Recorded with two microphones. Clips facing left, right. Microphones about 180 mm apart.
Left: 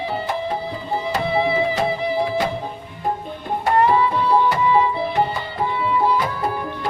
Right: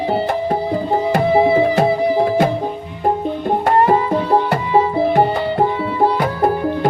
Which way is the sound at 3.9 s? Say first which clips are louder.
Right 3 dB; 45° right (ahead or behind).